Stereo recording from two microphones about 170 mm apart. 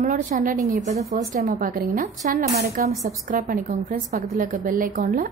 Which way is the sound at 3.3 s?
55° right (ahead or behind).